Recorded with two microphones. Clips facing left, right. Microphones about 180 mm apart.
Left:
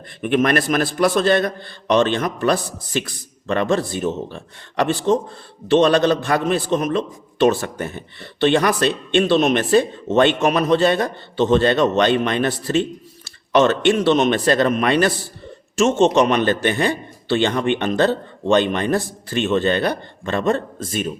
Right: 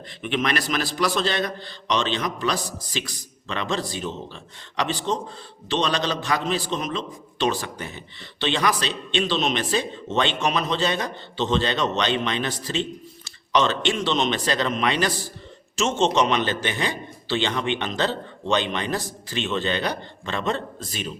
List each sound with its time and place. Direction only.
0.2 s a man's voice: 50° left (ahead or behind)
16.1 s a man's voice: 50° left (ahead or behind)